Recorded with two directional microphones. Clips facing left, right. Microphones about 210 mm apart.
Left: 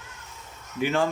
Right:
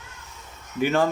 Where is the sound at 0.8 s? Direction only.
40° right (ahead or behind).